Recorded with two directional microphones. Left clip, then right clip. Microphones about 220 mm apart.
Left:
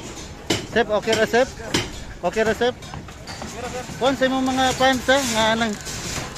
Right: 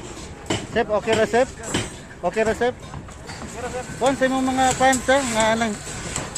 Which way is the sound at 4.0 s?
5° left (ahead or behind).